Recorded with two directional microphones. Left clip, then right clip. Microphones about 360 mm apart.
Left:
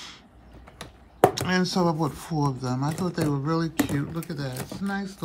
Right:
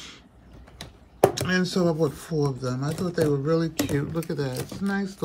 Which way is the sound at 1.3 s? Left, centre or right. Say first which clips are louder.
Even; centre.